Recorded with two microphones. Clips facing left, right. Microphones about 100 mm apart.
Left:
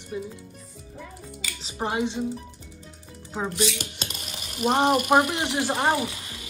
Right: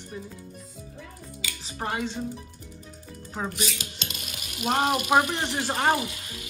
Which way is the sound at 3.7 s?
45° left (ahead or behind).